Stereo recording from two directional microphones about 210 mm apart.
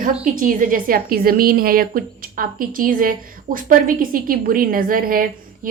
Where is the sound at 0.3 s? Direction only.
40° right (ahead or behind).